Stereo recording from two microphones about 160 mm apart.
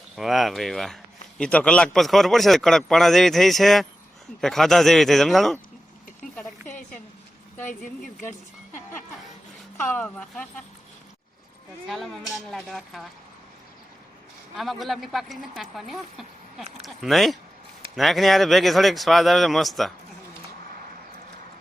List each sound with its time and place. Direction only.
0.2 s a man's voice: centre (ahead or behind)
7.7 s speech: 55° left (ahead or behind)
9.7 s speech: 10° left (ahead or behind)
11.9 s a man's voice: centre (ahead or behind)
14.5 s a man's voice: centre (ahead or behind)